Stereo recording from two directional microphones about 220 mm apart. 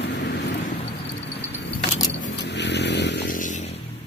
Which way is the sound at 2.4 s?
50° left (ahead or behind).